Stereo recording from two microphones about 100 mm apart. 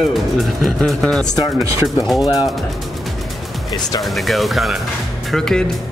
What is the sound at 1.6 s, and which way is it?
Speech, 30° right (ahead or behind).